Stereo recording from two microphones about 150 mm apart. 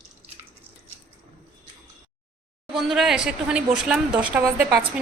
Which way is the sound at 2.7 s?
Centre (ahead or behind).